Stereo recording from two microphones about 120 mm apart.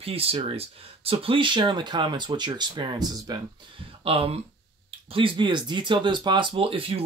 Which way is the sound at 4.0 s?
55° right (ahead or behind).